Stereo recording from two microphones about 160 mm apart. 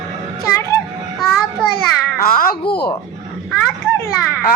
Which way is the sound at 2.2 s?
65° left (ahead or behind).